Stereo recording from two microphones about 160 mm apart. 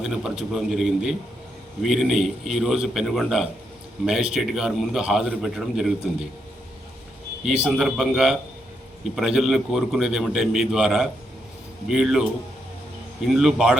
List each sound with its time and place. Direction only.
0.0 s a man's voice: 5° right (ahead or behind)
7.4 s a man's voice: centre (ahead or behind)
13.2 s a man's voice: centre (ahead or behind)